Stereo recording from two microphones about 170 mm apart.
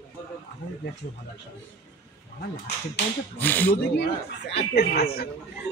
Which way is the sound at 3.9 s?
70° left (ahead or behind).